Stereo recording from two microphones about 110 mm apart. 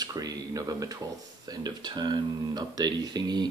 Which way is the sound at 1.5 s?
40° right (ahead or behind).